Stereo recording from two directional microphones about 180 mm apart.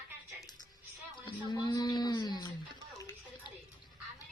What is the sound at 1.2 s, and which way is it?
A woman's voice, 25° left (ahead or behind).